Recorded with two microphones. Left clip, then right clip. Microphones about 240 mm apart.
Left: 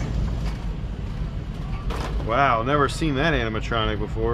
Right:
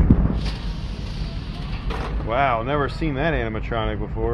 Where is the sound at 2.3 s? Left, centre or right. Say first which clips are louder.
Left 1 dB; left.